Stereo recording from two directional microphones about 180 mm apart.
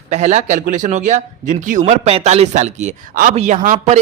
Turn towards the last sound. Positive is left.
turn(degrees=-40)  # may be behind; listen again after turning